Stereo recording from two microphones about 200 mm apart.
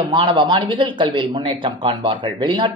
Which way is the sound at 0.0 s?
25° right (ahead or behind).